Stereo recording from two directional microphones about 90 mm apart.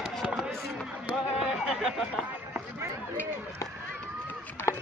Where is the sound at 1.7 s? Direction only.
5° right (ahead or behind).